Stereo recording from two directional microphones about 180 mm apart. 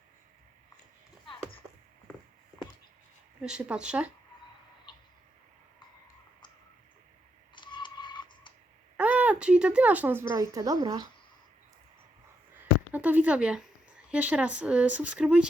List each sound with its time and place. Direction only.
3.4 s speech: 5° right (ahead or behind)
4.9 s a sound: 25° left (ahead or behind)
7.5 s typing: 25° left (ahead or behind)
9.0 s a woman's voice: 10° right (ahead or behind)
12.9 s speech: 10° right (ahead or behind)